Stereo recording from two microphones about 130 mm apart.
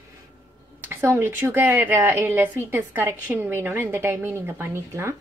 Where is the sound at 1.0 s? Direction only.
15° right (ahead or behind).